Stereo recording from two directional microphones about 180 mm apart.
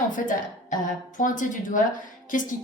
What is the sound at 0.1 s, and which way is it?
A woman's voice, 45° left (ahead or behind).